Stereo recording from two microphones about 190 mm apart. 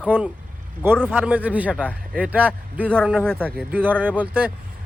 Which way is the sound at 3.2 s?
5° left (ahead or behind).